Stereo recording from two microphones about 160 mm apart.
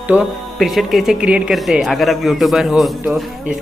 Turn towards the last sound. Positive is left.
turn(degrees=-5)  # may be behind; listen again after turning